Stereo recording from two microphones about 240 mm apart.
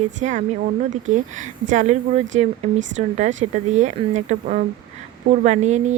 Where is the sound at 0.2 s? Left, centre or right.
Right.